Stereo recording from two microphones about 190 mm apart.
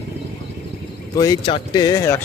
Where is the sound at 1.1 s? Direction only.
20° left (ahead or behind).